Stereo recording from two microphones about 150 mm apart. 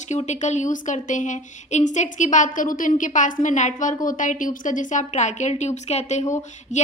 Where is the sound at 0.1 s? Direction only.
50° left (ahead or behind).